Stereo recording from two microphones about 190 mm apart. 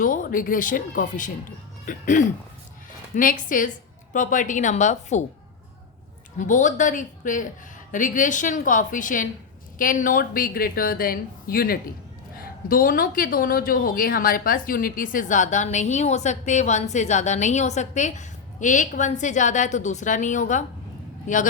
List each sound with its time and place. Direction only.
0.0 s a woman's voice: 45° left (ahead or behind)
6.4 s a woman's voice: 40° left (ahead or behind)